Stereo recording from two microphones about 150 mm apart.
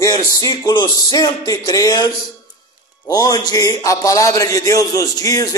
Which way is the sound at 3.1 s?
25° left (ahead or behind).